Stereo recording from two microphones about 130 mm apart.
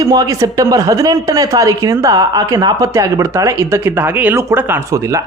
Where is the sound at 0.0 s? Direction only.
30° right (ahead or behind).